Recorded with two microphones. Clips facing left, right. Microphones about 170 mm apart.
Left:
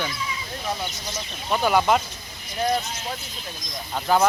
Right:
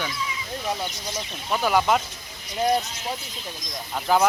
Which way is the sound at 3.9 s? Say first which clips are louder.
Even; 5° right (ahead or behind).